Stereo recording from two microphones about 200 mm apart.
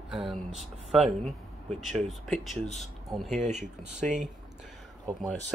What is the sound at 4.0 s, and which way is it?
Speech, 40° right (ahead or behind).